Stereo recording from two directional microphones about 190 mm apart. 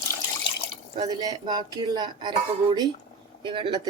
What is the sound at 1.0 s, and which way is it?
Speech, 20° right (ahead or behind).